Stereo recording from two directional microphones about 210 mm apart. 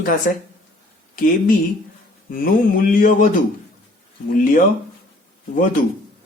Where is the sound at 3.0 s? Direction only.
40° left (ahead or behind).